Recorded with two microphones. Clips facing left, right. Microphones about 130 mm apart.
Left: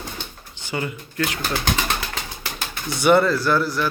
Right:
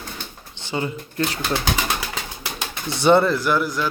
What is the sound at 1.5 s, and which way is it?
Speech, 5° right (ahead or behind).